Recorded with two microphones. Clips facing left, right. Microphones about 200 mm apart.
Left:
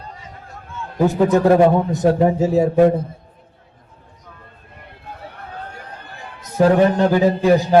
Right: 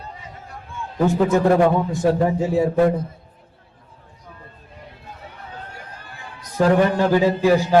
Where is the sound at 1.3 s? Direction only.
20° left (ahead or behind).